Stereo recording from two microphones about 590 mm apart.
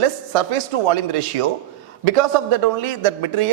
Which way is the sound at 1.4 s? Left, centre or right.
Right.